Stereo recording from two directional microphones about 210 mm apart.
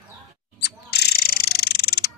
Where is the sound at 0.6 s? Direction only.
50° left (ahead or behind).